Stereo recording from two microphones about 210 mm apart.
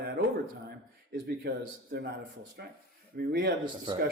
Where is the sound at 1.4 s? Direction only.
50° right (ahead or behind).